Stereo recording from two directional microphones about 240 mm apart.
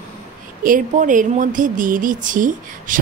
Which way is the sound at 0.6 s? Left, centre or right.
Right.